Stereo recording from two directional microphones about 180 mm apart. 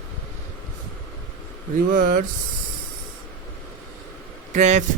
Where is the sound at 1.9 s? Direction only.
50° right (ahead or behind).